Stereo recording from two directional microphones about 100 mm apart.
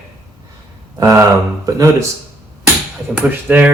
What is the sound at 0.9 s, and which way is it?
Speech, 35° right (ahead or behind).